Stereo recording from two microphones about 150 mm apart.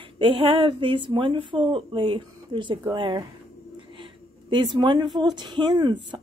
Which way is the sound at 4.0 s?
30° right (ahead or behind).